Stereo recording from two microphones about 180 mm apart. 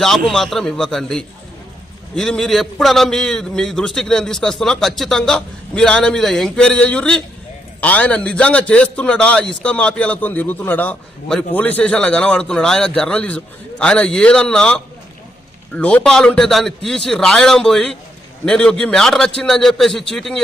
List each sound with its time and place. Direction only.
0.0 s a man's voice: centre (ahead or behind)